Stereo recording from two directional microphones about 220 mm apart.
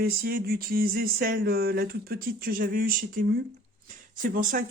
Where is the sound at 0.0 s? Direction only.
45° right (ahead or behind).